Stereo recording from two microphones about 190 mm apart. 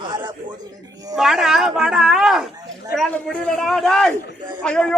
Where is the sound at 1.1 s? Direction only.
Centre (ahead or behind).